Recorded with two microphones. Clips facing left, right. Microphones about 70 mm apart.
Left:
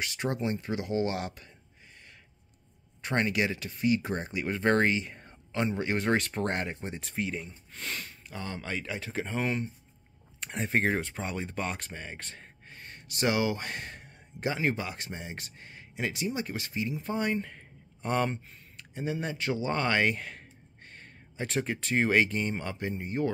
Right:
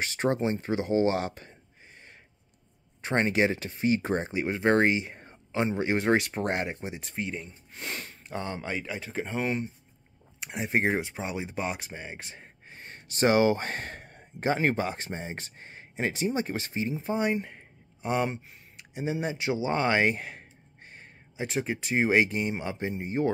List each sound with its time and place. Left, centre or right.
0.0 s speech: right
3.0 s speech: right; by 7.4 s centre
7.7 s speech: right
8.5 s a man's voice: centre
21.4 s speech: centre; by 23.3 s right